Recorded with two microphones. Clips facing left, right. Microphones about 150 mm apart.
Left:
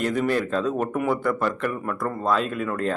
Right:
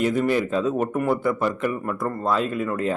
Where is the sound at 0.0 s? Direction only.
5° right (ahead or behind).